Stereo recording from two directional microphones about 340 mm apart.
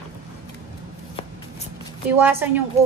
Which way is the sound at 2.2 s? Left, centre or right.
Centre.